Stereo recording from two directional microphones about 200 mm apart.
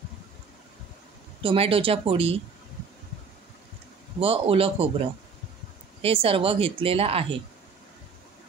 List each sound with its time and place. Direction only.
1.4 s speech: 25° right (ahead or behind)
4.2 s speech: 30° right (ahead or behind)
6.0 s speech: 25° right (ahead or behind)